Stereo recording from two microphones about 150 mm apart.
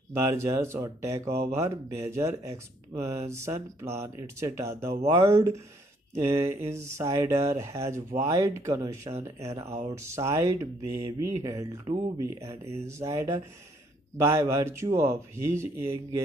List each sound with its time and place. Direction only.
0.1 s speech: 20° right (ahead or behind)